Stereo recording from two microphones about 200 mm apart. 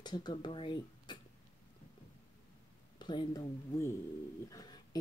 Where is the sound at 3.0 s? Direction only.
25° left (ahead or behind).